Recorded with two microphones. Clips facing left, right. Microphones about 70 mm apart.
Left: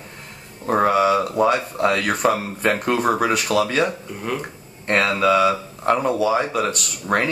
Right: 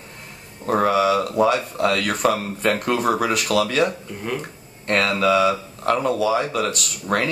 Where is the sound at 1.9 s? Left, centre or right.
Centre.